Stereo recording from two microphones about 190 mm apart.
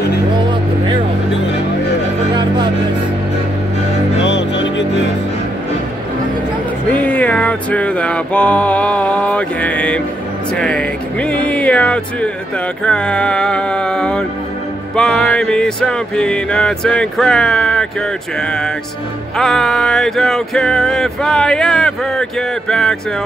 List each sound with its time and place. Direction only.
4.2 s music: 70° left (ahead or behind)
6.9 s music: 10° left (ahead or behind)